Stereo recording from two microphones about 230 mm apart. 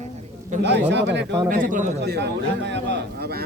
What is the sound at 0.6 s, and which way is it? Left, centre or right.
Speech, right.